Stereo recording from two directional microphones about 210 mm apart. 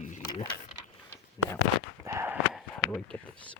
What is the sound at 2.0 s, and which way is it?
Gasp, 15° right (ahead or behind).